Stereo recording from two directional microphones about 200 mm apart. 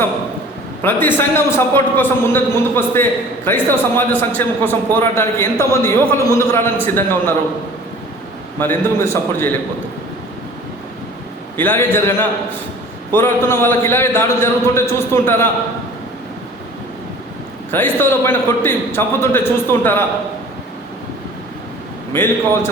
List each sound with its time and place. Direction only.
0.8 s a man's voice: 10° left (ahead or behind)
8.5 s a man's voice: 10° left (ahead or behind)
11.5 s a man's voice: 10° left (ahead or behind)
17.7 s a man's voice: 10° left (ahead or behind)
22.1 s a man's voice: 10° left (ahead or behind)